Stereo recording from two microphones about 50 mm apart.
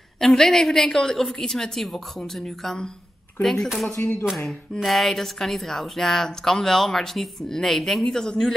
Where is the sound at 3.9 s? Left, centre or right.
Left.